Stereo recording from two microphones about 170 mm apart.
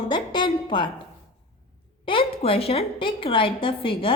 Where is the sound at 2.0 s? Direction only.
30° left (ahead or behind).